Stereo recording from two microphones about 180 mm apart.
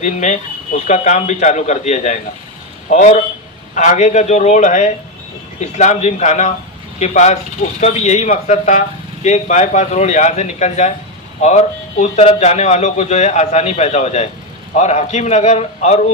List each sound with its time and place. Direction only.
0.0 s a man's voice: 40° left (ahead or behind)